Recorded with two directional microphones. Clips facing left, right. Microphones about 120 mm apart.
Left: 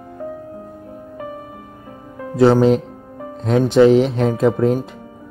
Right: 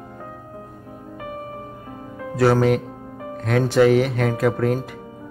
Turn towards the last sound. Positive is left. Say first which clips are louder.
# left 4 dB
turn(degrees=20)  # may be behind; listen again after turning